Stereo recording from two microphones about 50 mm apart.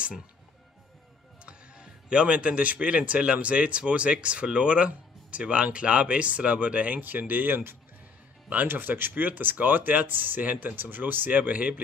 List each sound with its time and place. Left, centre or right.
1.4 s speech: right